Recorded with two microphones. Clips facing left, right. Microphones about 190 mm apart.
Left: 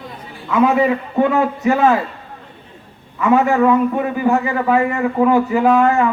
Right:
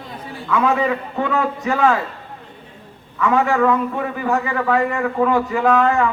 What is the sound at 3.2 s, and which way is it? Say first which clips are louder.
A man's voice: left 3 dB; 20° left (ahead or behind).